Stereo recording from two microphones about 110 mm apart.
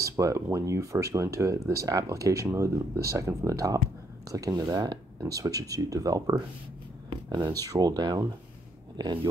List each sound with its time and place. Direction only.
0.1 s speech: 30° right (ahead or behind); by 9.3 s 45° right (ahead or behind)